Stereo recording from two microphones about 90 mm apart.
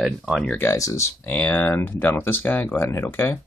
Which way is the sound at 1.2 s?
20° left (ahead or behind).